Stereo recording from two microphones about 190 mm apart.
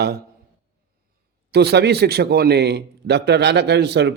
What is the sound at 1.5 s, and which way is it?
A man's voice, 60° right (ahead or behind).